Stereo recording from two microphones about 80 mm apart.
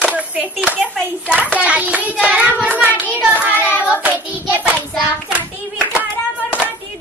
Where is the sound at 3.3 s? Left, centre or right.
Right.